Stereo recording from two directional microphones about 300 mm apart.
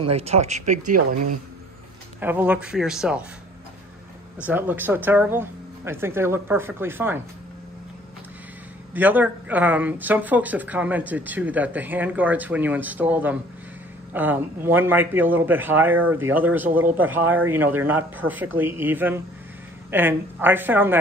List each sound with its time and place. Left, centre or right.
0.0 s speech: centre
2.1 s speech: centre
4.5 s speech: centre
8.9 s speech: centre